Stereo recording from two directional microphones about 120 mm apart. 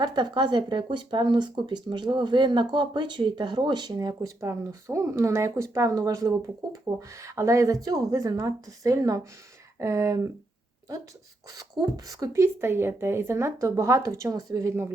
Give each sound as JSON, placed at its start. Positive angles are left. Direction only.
{"t": 0.0, "sound": "speech", "side_deg": -35}
{"t": 11.8, "sound": "speech", "side_deg": -30}